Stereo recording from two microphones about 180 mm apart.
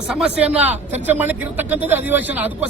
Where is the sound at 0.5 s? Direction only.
35° right (ahead or behind).